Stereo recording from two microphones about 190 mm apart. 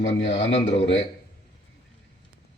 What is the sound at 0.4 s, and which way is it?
Speech, 75° left (ahead or behind).